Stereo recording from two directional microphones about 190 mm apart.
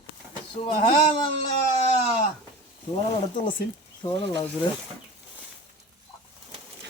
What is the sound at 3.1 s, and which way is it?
Speech, 25° left (ahead or behind).